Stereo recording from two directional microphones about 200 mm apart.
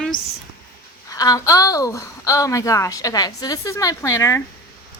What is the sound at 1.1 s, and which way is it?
Speech, 20° left (ahead or behind).